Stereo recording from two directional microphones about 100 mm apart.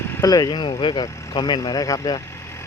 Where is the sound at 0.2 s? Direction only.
40° left (ahead or behind).